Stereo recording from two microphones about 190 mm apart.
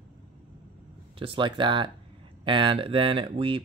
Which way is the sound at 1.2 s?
25° right (ahead or behind).